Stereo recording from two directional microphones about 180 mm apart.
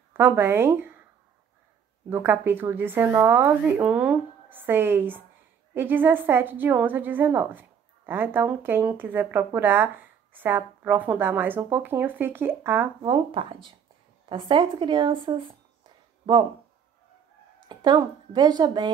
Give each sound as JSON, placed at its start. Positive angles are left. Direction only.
{"t": 0.1, "sound": "speech", "side_deg": -10}
{"t": 2.0, "sound": "speech", "side_deg": -10}
{"t": 13.0, "sound": "a woman's voice", "side_deg": -30}
{"t": 17.6, "sound": "a woman's voice", "side_deg": -25}